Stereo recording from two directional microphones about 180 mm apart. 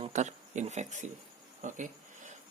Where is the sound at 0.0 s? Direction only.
40° right (ahead or behind).